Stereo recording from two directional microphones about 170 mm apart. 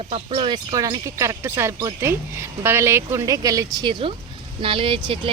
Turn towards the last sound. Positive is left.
turn(degrees=-30)  # may be behind; listen again after turning